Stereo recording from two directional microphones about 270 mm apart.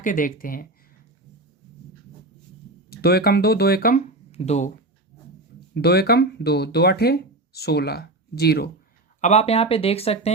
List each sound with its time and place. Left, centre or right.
0.0 s speech: left
2.9 s speech: left
5.7 s speech: left
9.2 s speech: left